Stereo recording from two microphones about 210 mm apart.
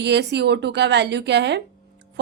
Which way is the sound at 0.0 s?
55° right (ahead or behind).